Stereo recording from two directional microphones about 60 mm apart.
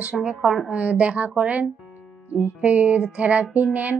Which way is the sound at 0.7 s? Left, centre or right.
Right.